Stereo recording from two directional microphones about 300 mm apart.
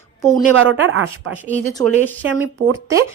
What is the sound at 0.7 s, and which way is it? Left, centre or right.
Speech, right.